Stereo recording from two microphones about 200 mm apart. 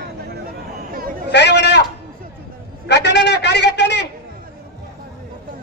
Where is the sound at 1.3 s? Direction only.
60° left (ahead or behind).